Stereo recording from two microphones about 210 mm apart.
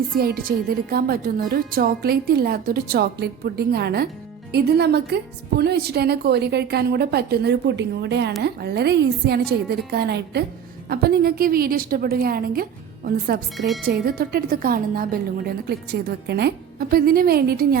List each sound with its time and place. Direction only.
0.2 s a woman's voice: 45° right (ahead or behind)